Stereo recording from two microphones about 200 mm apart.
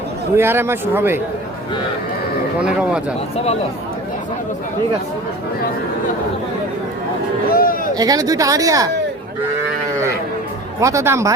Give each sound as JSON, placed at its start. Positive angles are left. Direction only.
{"t": 0.3, "sound": "speech", "side_deg": -10}
{"t": 2.6, "sound": "speech", "side_deg": -5}
{"t": 3.3, "sound": "speech", "side_deg": 30}
{"t": 7.5, "sound": "a sound", "side_deg": 45}
{"t": 7.9, "sound": "speech", "side_deg": -20}
{"t": 10.8, "sound": "speech", "side_deg": -15}